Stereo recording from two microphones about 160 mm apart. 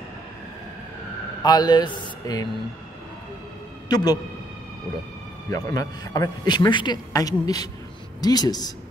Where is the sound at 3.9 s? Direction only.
25° left (ahead or behind).